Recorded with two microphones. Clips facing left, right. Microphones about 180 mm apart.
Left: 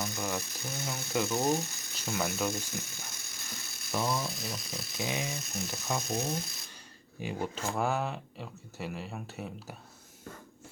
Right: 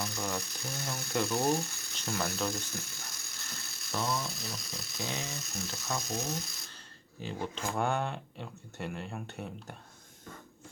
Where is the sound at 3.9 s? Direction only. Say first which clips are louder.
Left 2 dB; 10° left (ahead or behind).